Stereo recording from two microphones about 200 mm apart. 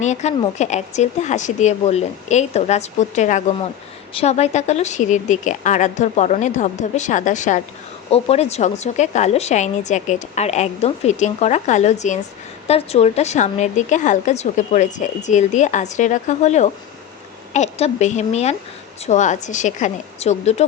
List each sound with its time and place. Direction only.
0.0 s a woman's voice: 35° left (ahead or behind)